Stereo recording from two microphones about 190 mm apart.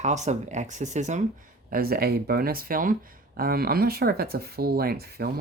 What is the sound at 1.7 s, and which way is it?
Speech, 55° right (ahead or behind).